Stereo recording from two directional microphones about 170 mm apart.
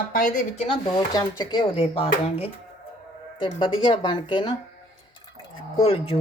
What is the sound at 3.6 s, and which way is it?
Speech, 30° left (ahead or behind).